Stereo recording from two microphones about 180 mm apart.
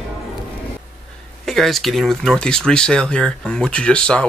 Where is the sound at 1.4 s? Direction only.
Centre (ahead or behind).